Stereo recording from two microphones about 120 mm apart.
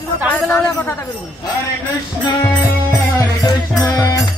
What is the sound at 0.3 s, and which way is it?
Speech, 15° left (ahead or behind).